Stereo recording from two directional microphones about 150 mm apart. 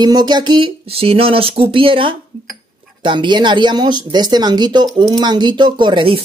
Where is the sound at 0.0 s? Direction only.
25° right (ahead or behind).